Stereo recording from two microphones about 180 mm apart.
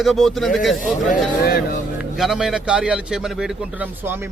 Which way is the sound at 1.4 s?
60° left (ahead or behind).